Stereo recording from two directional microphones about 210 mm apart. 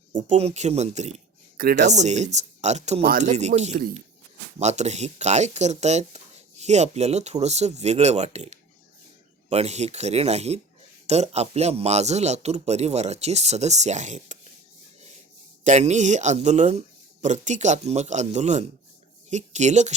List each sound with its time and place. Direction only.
0.1 s speech: 35° right (ahead or behind)
15.6 s speech: 35° right (ahead or behind)